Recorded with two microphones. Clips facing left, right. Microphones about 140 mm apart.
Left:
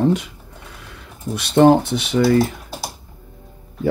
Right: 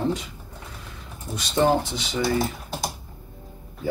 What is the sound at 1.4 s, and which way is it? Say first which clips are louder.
Speech: left 8 dB; 60° left (ahead or behind).